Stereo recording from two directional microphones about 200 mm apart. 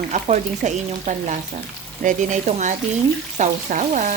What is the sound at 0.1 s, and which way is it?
Speech, 35° right (ahead or behind).